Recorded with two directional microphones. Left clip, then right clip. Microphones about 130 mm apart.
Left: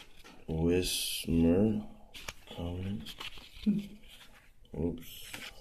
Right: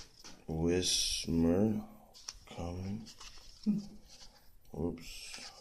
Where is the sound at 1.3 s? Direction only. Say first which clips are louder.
Left 5 dB; 15° right (ahead or behind).